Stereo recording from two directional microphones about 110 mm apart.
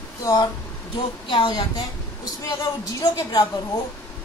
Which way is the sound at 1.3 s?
50° left (ahead or behind).